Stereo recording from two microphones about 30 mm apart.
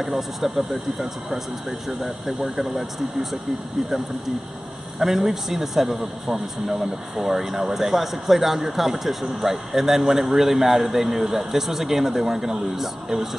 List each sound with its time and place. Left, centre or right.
0.0 s speech: centre
1.7 s speech: centre
5.0 s speech: centre